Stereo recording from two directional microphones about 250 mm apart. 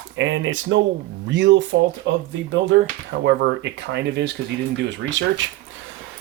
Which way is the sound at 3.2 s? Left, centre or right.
Right.